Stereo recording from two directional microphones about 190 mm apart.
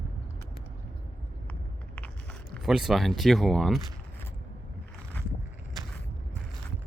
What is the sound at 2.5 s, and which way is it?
Speech, 5° right (ahead or behind).